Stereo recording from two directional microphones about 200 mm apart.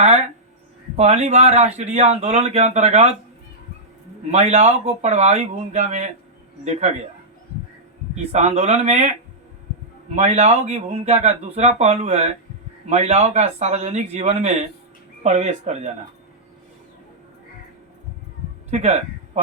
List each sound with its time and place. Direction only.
0.0 s a sound: 35° right (ahead or behind)
0.9 s speech: 35° right (ahead or behind)
4.3 s speech: 35° right (ahead or behind)
8.1 s speech: 35° right (ahead or behind)
18.7 s speech: 35° right (ahead or behind)